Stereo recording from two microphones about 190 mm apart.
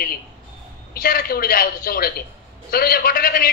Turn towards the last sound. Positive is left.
turn(degrees=50)  # may be behind; listen again after turning